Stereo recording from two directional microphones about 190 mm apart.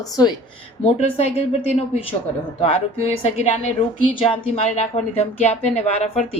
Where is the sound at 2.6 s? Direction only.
30° left (ahead or behind).